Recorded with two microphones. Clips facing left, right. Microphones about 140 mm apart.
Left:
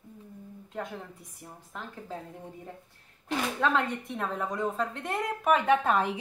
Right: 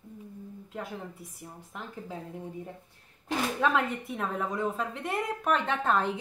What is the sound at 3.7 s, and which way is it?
A woman's voice, 5° right (ahead or behind).